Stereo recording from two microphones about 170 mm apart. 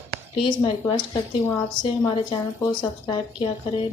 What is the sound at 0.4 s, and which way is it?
Speech, 30° left (ahead or behind).